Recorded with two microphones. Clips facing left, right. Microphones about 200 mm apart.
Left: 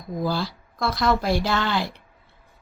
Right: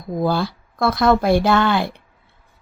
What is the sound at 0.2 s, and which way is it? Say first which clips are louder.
A woman's voice: right 6 dB; 55° right (ahead or behind).